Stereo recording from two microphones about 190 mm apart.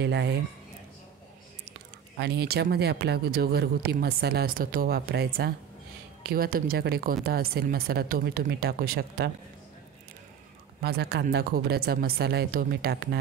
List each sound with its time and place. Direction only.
0.0 s speech: 65° right (ahead or behind)
2.1 s a woman's voice: 60° right (ahead or behind)
10.8 s speech: 55° right (ahead or behind)